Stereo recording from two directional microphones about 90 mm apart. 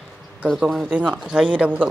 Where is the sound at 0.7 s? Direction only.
10° right (ahead or behind).